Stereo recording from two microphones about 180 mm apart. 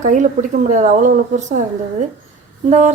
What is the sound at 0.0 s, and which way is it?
A woman's voice, 45° right (ahead or behind).